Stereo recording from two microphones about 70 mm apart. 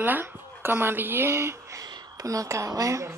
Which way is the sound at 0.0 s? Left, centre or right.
Right.